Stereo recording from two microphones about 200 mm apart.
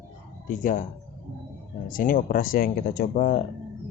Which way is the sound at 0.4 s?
40° left (ahead or behind).